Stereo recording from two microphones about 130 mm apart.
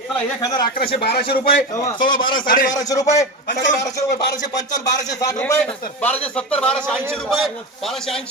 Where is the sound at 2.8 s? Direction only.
30° left (ahead or behind).